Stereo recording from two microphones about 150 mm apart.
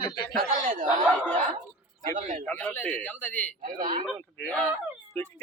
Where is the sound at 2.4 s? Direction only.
10° left (ahead or behind).